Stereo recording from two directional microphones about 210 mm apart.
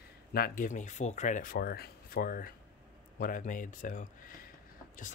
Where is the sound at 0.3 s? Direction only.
45° left (ahead or behind).